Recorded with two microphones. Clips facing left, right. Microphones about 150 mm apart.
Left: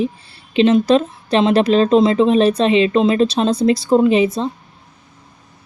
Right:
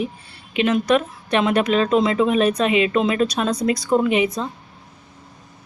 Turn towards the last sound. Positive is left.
turn(degrees=30)  # may be behind; listen again after turning